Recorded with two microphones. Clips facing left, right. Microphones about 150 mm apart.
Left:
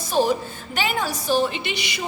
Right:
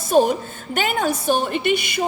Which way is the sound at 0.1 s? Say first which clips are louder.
Right 4 dB; 50° right (ahead or behind).